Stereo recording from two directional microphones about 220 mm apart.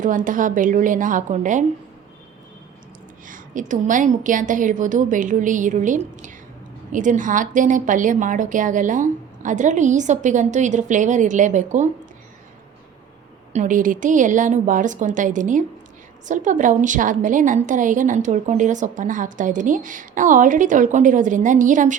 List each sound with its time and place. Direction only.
0.0 s a woman's voice: 35° right (ahead or behind)
3.2 s a woman's voice: 35° right (ahead or behind)
13.5 s a woman's voice: 35° right (ahead or behind)